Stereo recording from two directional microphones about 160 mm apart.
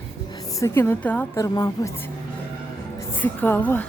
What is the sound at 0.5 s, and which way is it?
Speech, 15° left (ahead or behind).